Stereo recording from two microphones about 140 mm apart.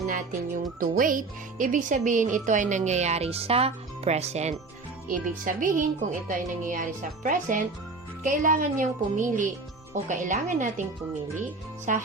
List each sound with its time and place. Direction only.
0.0 s music: 65° right (ahead or behind)
5.0 s a woman's voice: 70° right (ahead or behind)
9.9 s music: 60° right (ahead or behind)
11.9 s music: 65° right (ahead or behind)